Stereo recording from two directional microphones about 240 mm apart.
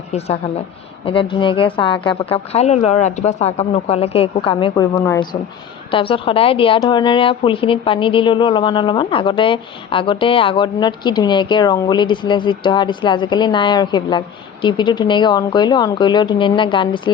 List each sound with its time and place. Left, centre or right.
0.1 s a woman's voice: left